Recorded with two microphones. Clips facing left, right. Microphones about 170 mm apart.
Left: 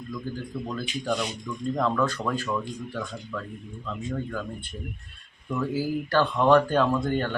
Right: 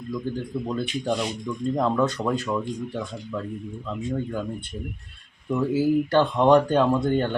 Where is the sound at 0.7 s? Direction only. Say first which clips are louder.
Right 3 dB; 25° right (ahead or behind).